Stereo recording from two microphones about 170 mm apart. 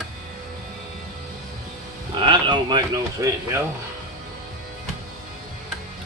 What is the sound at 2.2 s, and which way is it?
Speech, 30° right (ahead or behind).